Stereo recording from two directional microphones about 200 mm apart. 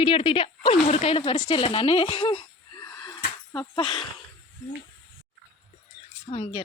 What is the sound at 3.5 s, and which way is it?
Speech, 25° left (ahead or behind).